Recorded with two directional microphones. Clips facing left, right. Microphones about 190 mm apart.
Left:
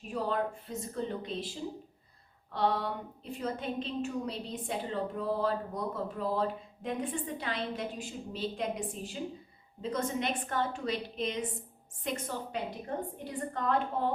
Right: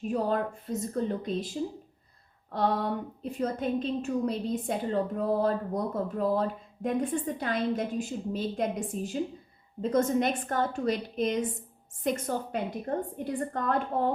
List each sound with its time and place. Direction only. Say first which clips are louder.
0.1 s a woman's voice: right 3 dB; 45° right (ahead or behind)
2.5 s a woman's voice: right 3 dB; 45° right (ahead or behind)